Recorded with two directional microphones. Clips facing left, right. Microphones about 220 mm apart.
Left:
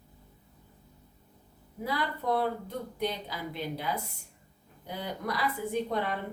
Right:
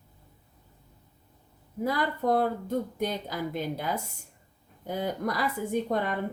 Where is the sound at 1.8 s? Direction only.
45° right (ahead or behind).